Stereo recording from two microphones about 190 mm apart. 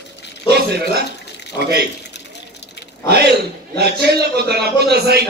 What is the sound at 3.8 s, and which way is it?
A man's voice, 60° right (ahead or behind).